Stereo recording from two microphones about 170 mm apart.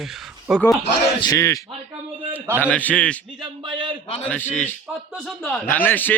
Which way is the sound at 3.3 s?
25° right (ahead or behind).